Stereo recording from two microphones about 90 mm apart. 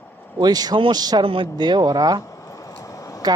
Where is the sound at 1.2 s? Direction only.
75° right (ahead or behind).